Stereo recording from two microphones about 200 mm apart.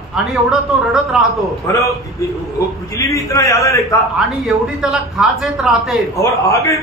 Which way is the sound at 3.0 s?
15° left (ahead or behind).